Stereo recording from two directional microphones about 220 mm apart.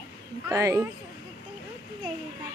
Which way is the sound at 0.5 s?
15° right (ahead or behind).